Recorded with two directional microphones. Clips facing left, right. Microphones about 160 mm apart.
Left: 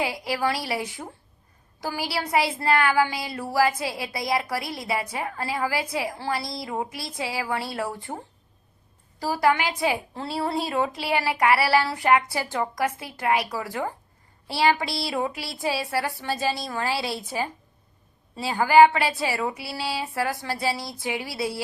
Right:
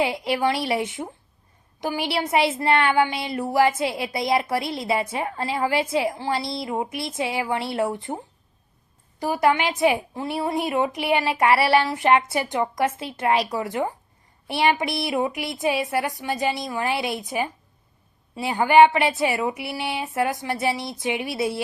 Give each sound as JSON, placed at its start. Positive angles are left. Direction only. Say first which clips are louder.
{"t": 0.0, "sound": "speech", "louder": "right 4 dB", "side_deg": -25}